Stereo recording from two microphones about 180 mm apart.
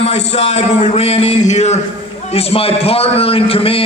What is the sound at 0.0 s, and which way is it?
A man's voice, 35° left (ahead or behind).